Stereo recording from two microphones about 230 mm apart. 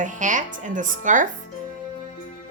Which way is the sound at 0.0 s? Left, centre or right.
Right.